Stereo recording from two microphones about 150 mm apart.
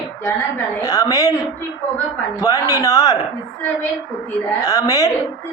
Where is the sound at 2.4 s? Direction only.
20° left (ahead or behind).